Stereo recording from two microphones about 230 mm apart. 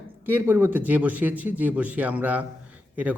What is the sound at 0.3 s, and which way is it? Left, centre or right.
A man's voice, centre.